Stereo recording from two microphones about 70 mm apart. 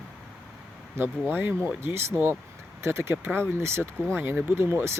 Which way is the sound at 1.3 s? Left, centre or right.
Right.